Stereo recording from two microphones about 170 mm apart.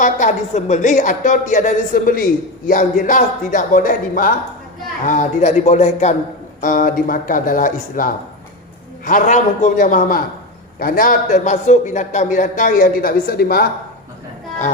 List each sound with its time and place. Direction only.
0.0 s a woman's voice: 45° left (ahead or behind)
5.0 s a woman's voice: 45° left (ahead or behind)
6.6 s a man's voice: 55° left (ahead or behind)